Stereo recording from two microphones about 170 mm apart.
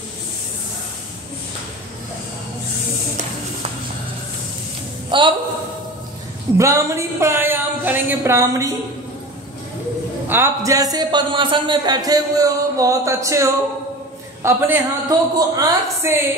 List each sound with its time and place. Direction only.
5.1 s a woman's voice: 25° right (ahead or behind)
6.6 s speech: 15° right (ahead or behind)
10.2 s a man's voice: 15° right (ahead or behind)